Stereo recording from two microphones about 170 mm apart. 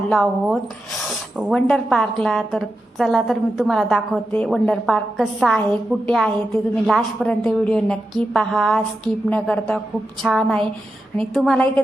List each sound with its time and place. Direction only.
0.1 s a woman's voice: centre (ahead or behind)